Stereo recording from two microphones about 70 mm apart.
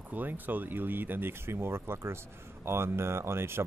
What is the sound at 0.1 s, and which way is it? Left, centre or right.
Speech, right.